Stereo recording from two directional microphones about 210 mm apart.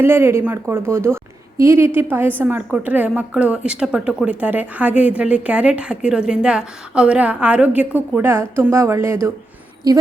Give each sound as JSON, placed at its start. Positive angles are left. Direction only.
{"t": 0.0, "sound": "a woman's voice", "side_deg": -10}